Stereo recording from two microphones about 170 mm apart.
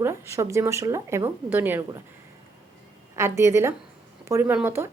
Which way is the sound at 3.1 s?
15° right (ahead or behind).